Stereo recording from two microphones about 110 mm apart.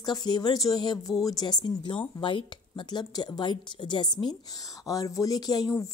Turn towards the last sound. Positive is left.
turn(degrees=35)  # may be behind; listen again after turning